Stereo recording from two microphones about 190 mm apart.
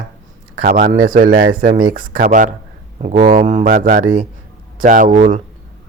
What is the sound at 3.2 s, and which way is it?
A man's voice, 30° right (ahead or behind).